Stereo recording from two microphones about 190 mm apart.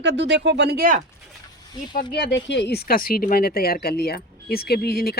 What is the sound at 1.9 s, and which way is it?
Speech, 60° left (ahead or behind).